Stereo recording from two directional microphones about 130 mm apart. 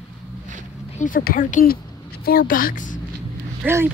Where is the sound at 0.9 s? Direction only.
90° left.